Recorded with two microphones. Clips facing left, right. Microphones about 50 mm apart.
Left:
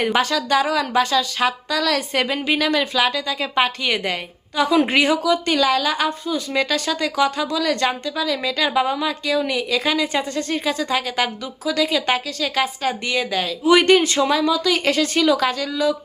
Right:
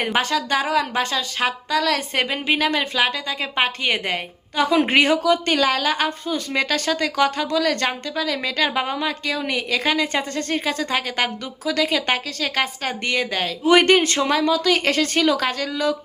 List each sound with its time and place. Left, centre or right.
0.0 s a woman's voice: right